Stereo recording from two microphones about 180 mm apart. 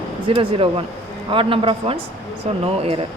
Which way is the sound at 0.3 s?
30° right (ahead or behind).